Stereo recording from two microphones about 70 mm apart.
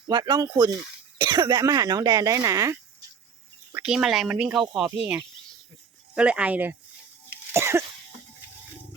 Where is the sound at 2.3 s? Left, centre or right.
Right.